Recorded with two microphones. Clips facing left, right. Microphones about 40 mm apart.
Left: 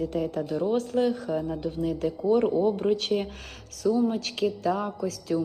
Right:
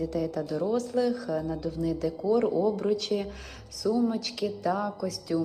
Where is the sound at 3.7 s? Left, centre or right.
Left.